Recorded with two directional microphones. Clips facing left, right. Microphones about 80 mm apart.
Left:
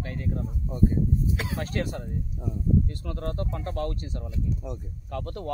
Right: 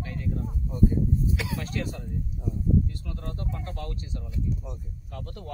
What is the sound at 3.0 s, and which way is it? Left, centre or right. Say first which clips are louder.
Speech: left 6 dB; left.